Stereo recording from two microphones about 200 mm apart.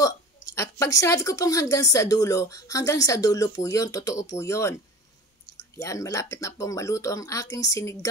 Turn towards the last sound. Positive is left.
turn(degrees=15)  # may be behind; listen again after turning